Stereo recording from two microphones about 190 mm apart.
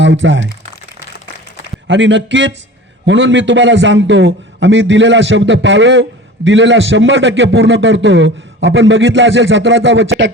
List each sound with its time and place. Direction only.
0.0 s speech: 75° right (ahead or behind)
1.9 s a man's voice: 70° right (ahead or behind)